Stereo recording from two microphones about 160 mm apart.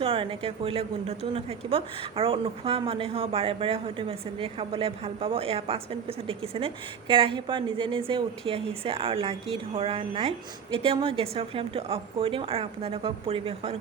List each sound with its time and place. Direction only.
0.0 s a woman's voice: 35° right (ahead or behind)